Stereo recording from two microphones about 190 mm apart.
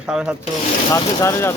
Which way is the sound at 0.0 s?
5° right (ahead or behind).